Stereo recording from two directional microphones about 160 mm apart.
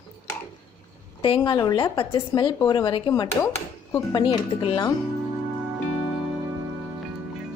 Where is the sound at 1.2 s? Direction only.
30° left (ahead or behind).